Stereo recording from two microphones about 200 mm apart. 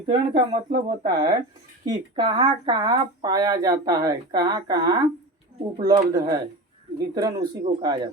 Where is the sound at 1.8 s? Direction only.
20° right (ahead or behind).